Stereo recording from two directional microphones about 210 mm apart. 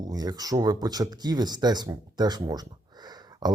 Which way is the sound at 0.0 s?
20° right (ahead or behind).